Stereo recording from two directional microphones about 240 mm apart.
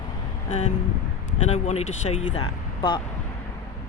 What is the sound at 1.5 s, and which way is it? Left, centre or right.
Speech, left.